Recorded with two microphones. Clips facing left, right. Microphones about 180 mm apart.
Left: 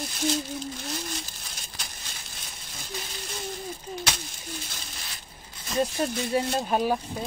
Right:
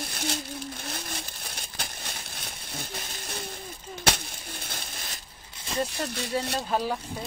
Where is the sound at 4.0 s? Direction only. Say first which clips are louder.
Right 4 dB; 60° right (ahead or behind).